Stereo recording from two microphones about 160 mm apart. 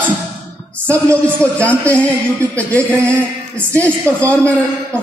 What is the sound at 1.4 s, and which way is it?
Speech, 10° left (ahead or behind).